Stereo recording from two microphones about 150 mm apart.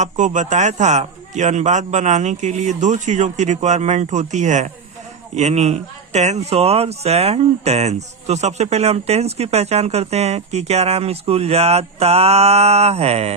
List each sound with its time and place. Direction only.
0.0 s speech: 55° right (ahead or behind)